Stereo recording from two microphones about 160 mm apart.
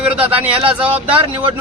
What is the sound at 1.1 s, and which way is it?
Speech, 30° right (ahead or behind).